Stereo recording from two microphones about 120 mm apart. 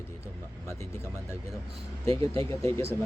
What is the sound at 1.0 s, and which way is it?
Speech, 25° left (ahead or behind).